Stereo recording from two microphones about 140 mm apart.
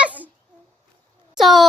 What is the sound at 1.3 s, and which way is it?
Speech, centre (ahead or behind).